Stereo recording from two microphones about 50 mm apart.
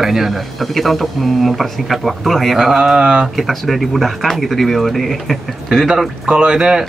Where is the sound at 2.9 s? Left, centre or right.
Centre.